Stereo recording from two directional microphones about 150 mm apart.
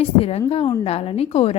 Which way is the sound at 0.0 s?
40° left (ahead or behind).